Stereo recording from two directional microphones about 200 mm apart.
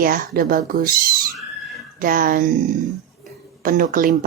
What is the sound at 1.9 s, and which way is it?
Speech, 40° right (ahead or behind).